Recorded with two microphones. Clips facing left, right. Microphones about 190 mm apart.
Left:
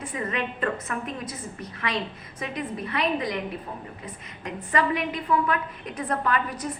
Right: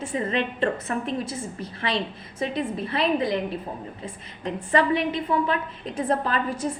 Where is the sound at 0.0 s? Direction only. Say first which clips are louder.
Right 4 dB; 30° right (ahead or behind).